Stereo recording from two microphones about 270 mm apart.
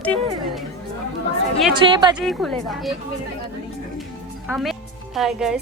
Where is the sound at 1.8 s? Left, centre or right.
Centre.